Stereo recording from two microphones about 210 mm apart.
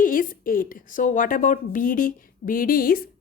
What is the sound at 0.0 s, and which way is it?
A woman's voice, 40° left (ahead or behind).